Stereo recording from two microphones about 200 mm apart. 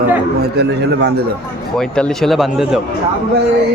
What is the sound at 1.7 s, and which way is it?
A man's voice, 5° left (ahead or behind).